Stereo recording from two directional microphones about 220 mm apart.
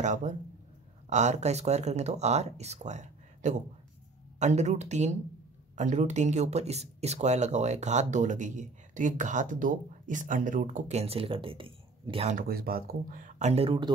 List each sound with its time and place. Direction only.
0.0 s speech: 35° right (ahead or behind)